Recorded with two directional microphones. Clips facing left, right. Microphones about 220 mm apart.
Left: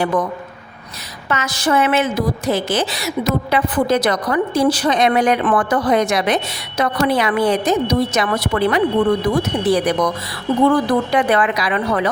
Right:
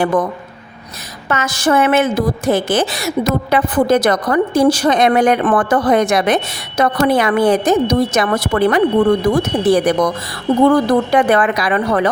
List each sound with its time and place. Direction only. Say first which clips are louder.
0.0 s a woman's voice: right 3 dB; 45° right (ahead or behind)
1.3 s a woman's voice: right 3 dB; 50° right (ahead or behind)